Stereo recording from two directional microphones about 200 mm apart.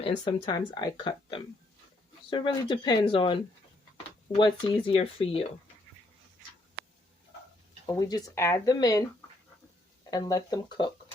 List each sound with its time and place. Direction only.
0.0 s speech: 25° left (ahead or behind)
7.9 s speech: 20° left (ahead or behind)
10.1 s speech: 20° left (ahead or behind)